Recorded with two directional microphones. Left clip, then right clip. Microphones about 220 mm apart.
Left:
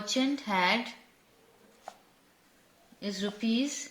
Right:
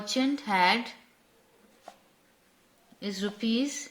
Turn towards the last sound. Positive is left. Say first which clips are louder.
# right 1 dB
turn(degrees=-25)  # may be behind; listen again after turning